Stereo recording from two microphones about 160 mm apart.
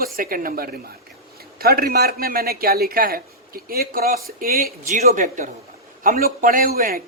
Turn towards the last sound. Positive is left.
turn(degrees=-65)  # may be behind; listen again after turning